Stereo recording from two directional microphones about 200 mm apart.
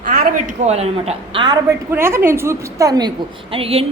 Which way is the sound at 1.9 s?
10° right (ahead or behind).